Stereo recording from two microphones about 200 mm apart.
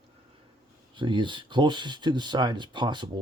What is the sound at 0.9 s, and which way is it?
Speech, 25° right (ahead or behind).